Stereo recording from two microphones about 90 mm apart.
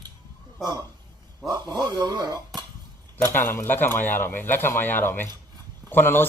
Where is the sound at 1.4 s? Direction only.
50° right (ahead or behind).